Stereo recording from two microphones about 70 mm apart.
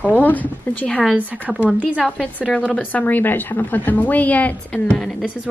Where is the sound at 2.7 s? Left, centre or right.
Left.